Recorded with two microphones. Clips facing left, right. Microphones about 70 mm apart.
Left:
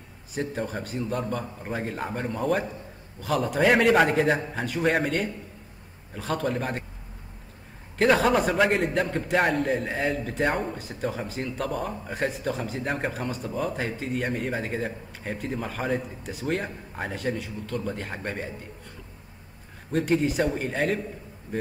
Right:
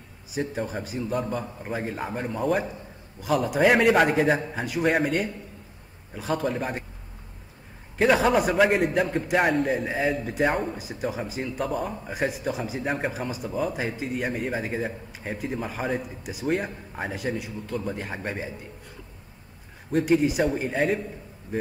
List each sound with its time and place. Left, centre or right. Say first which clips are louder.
0.3 s a man's voice: right 1 dB; centre
8.0 s a man's voice: even; centre
19.9 s a man's voice: right 2 dB; centre